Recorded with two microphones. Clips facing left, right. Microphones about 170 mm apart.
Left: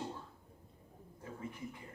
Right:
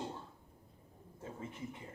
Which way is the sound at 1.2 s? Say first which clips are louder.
Even; 25° right (ahead or behind).